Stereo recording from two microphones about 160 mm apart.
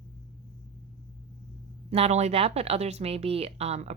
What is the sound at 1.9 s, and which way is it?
Speech, 45° right (ahead or behind).